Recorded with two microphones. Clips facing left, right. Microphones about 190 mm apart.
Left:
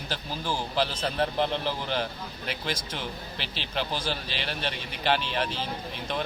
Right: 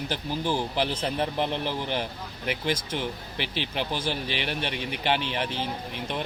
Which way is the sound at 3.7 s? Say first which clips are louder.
Left 1 dB; 15° right (ahead or behind).